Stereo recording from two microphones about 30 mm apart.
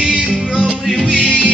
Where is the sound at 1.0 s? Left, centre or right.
Centre.